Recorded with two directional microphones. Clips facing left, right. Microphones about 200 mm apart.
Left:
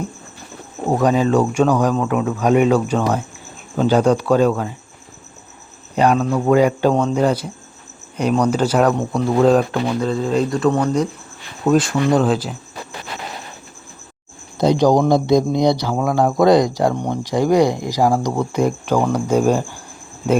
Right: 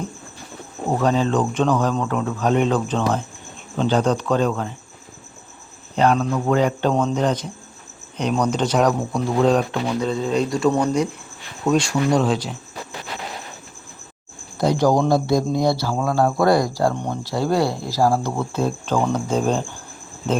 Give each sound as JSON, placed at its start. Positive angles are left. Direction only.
{"t": 0.9, "sound": "speech", "side_deg": 15}
{"t": 6.0, "sound": "speech", "side_deg": 10}
{"t": 14.6, "sound": "speech", "side_deg": 20}